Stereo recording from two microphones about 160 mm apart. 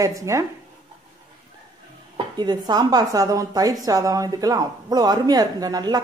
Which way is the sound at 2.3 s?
25° right (ahead or behind).